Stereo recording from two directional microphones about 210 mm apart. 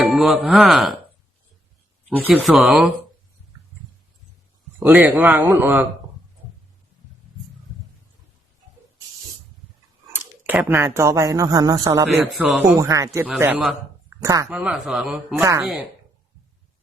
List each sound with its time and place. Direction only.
0.0 s speech: centre (ahead or behind)
2.3 s a man's voice: centre (ahead or behind)
4.8 s a man's voice: 10° right (ahead or behind)
10.1 s speech: 10° right (ahead or behind)
12.0 s a man's voice: 5° right (ahead or behind)
12.7 s a man's voice: 15° right (ahead or behind)
14.5 s a man's voice: 5° right (ahead or behind)